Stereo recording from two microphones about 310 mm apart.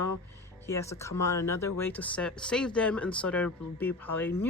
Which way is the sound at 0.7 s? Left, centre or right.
Centre.